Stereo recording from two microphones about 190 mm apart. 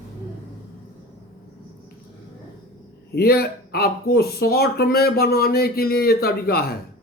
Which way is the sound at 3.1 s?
55° left (ahead or behind).